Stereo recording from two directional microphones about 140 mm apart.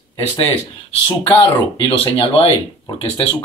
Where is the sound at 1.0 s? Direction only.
30° left (ahead or behind).